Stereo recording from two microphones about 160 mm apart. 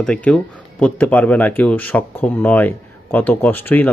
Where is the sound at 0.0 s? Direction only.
5° left (ahead or behind).